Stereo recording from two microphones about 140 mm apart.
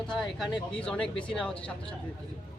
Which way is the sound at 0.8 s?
5° left (ahead or behind).